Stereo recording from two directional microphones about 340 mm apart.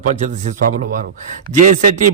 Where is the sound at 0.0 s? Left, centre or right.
Right.